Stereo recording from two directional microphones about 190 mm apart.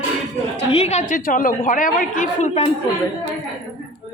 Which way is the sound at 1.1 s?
45° left (ahead or behind).